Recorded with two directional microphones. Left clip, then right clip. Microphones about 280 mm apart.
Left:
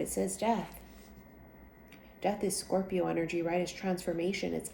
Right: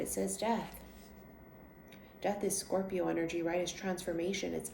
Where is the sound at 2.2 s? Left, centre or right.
Left.